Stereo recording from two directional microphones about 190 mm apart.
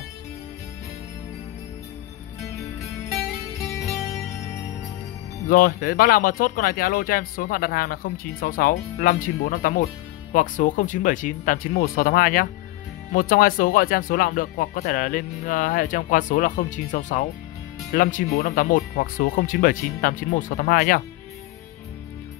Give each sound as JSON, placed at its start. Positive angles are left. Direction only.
{"t": 5.5, "sound": "speech", "side_deg": 50}